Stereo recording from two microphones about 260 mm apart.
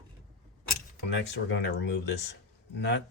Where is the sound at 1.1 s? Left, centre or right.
Left.